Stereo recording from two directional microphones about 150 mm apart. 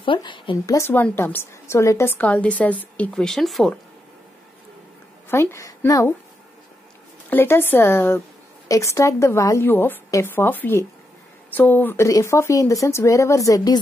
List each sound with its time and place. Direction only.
0.0 s speech: 35° left (ahead or behind)
0.7 s a woman's voice: 15° left (ahead or behind)
5.3 s a woman's voice: 15° left (ahead or behind)
7.2 s a woman's voice: 15° left (ahead or behind)